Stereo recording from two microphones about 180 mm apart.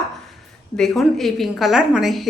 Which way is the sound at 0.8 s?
Centre (ahead or behind).